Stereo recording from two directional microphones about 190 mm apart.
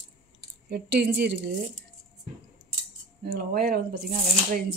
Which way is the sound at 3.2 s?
50° right (ahead or behind).